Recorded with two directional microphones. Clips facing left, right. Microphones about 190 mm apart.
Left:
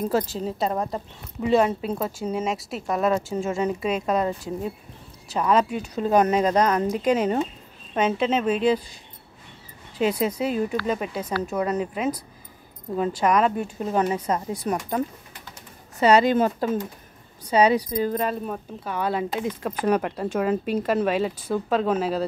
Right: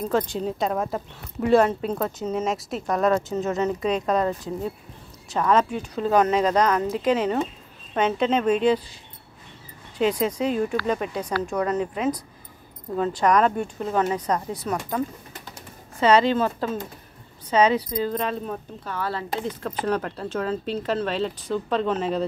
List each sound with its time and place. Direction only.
0.1 s speech: centre (ahead or behind)
6.5 s speech: 30° left (ahead or behind)
6.9 s speech: 15° left (ahead or behind)
9.9 s speech: 5° left (ahead or behind)
11.5 s speech: 15° left (ahead or behind)
16.0 s speech: 10° left (ahead or behind)